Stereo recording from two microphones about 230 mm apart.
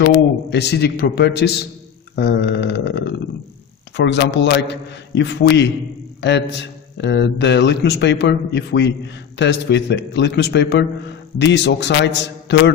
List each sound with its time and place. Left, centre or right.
0.5 s a man's voice: left
6.9 s a man's voice: left